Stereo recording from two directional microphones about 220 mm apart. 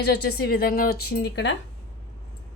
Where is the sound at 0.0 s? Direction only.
50° left (ahead or behind).